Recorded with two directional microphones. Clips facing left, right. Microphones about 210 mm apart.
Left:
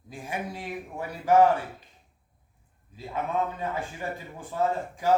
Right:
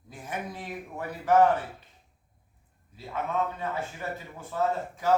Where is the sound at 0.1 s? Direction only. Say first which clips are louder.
Left 2 dB; 10° left (ahead or behind).